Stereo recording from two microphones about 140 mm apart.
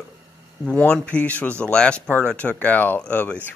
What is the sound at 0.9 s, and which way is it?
Speech, 10° left (ahead or behind).